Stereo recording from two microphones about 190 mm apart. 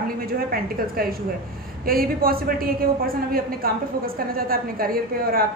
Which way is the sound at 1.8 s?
50° right (ahead or behind).